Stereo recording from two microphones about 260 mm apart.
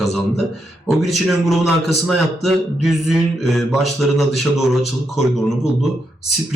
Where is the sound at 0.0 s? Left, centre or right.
Centre.